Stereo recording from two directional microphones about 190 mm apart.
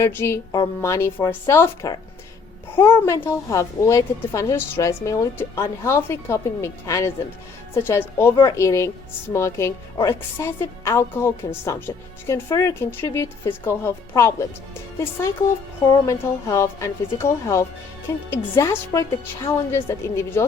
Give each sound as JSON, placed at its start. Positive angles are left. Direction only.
{"t": 0.0, "sound": "a woman's voice", "side_deg": 15}
{"t": 15.9, "sound": "a woman's voice", "side_deg": 15}